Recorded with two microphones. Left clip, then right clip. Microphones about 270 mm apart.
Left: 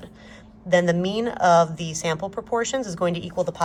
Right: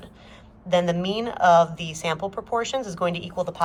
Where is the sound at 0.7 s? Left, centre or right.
Left.